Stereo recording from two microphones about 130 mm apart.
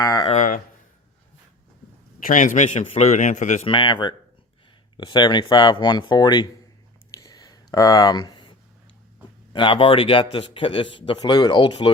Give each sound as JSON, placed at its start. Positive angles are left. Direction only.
{"t": 0.0, "sound": "speech", "side_deg": 30}
{"t": 0.3, "sound": "a sound", "side_deg": 75}
{"t": 2.2, "sound": "a man's voice", "side_deg": 90}
{"t": 3.7, "sound": "speech", "side_deg": 35}
{"t": 7.1, "sound": "a sound", "side_deg": 30}
{"t": 9.5, "sound": "speech", "side_deg": 40}